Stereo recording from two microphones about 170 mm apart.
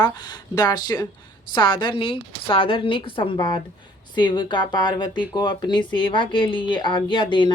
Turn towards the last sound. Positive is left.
turn(degrees=30)  # may be behind; listen again after turning